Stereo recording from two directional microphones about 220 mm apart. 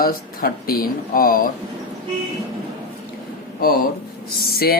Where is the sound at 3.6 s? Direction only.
40° left (ahead or behind).